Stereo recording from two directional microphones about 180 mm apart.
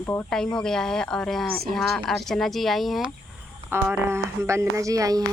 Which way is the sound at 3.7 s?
15° right (ahead or behind).